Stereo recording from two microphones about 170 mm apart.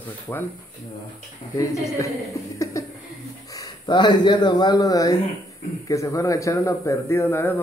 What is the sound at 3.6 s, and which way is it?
A man's voice, 25° left (ahead or behind).